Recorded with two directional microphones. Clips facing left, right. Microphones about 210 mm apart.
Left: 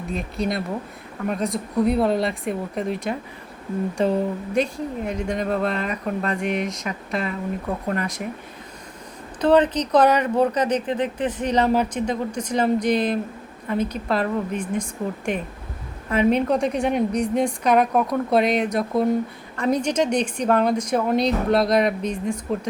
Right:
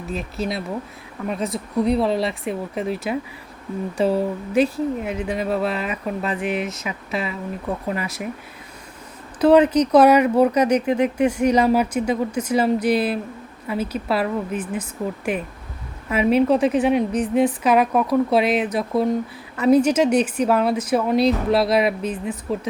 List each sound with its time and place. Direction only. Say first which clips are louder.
0.1 s speech: left 1 dB; centre (ahead or behind)
9.4 s speech: right 4 dB; 10° right (ahead or behind)